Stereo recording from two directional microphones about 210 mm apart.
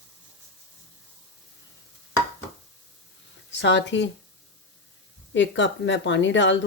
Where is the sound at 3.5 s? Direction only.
55° left (ahead or behind).